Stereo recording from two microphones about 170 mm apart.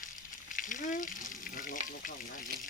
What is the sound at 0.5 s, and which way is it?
Frying, 50° left (ahead or behind).